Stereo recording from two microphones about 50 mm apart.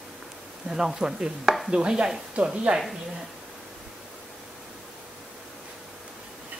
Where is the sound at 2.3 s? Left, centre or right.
Right.